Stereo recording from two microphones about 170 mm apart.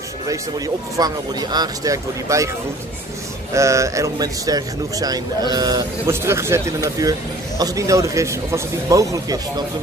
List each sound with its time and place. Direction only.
0.9 s speech: 20° right (ahead or behind)
3.5 s speech: 15° right (ahead or behind)